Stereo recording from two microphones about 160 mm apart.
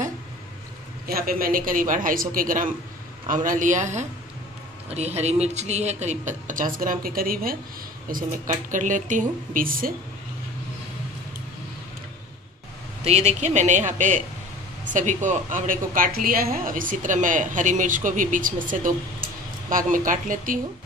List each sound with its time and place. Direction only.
1.0 s a woman's voice: 65° right (ahead or behind)
13.0 s a woman's voice: 45° right (ahead or behind)